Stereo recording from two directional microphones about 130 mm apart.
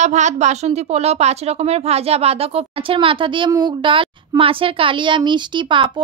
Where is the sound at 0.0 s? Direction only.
65° right (ahead or behind).